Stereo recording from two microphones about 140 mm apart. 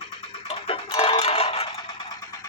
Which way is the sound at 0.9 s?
35° left (ahead or behind).